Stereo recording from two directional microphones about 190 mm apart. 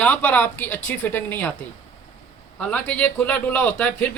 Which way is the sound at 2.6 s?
5° left (ahead or behind).